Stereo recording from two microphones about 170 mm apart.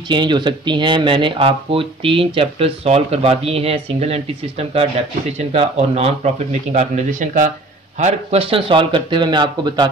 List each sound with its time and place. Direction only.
0.1 s speech: 25° right (ahead or behind); by 7.5 s 50° right (ahead or behind)
8.0 s speech: 35° right (ahead or behind)